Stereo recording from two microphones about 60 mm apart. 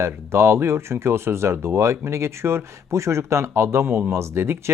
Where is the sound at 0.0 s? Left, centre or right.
Right.